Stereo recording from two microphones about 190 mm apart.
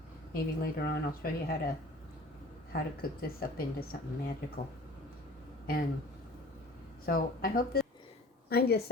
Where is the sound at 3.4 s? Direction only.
50° left (ahead or behind).